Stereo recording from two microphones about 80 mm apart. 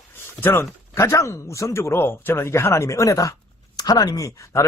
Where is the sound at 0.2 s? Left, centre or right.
Left.